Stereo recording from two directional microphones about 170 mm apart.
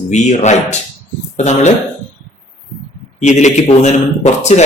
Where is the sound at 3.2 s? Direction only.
45° left (ahead or behind).